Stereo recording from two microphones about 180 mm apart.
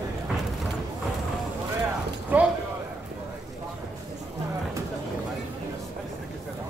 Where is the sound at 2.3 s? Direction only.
10° right (ahead or behind).